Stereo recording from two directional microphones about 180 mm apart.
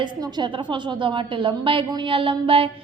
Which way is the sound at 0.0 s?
25° right (ahead or behind).